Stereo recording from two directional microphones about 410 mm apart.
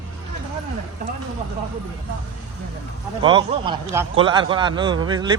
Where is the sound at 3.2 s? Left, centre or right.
Centre.